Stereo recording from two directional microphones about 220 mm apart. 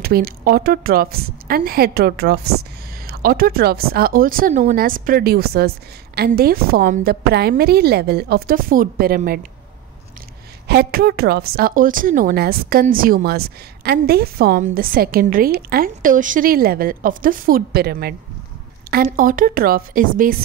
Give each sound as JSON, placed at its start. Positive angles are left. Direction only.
{"t": 0.0, "sound": "speech", "side_deg": -45}
{"t": 10.7, "sound": "speech", "side_deg": -45}